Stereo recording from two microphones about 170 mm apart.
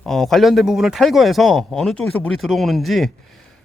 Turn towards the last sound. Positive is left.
turn(degrees=0)  # may be behind; listen again after turning